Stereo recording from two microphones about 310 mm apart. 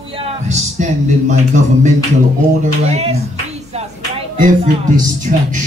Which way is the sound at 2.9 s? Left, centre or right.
Right.